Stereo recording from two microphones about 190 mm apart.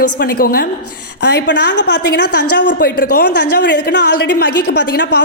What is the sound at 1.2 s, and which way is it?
A woman's voice, 65° left (ahead or behind).